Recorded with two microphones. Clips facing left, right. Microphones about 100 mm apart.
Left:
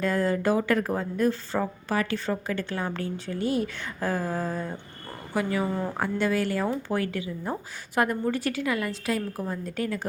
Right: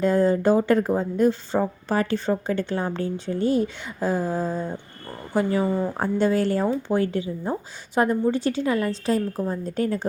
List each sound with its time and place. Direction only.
0.0 s a woman's voice: 25° right (ahead or behind)
3.8 s a woman's voice: 20° right (ahead or behind); by 10.1 s 35° right (ahead or behind)